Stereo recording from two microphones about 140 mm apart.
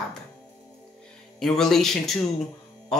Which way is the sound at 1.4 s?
5° left (ahead or behind).